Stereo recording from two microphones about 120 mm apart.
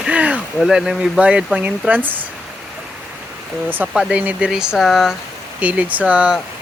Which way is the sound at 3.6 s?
15° right (ahead or behind).